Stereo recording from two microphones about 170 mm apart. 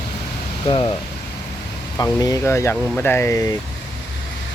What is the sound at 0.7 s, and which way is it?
Speech, 25° left (ahead or behind).